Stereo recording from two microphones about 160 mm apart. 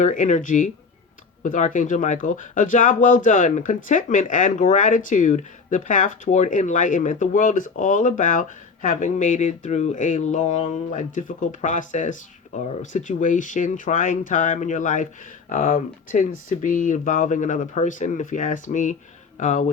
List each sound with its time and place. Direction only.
0.0 s speech: 50° left (ahead or behind)